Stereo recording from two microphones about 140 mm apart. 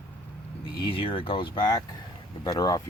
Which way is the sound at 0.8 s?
40° left (ahead or behind).